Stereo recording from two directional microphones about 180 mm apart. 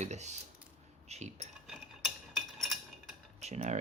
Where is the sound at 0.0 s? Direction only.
40° right (ahead or behind).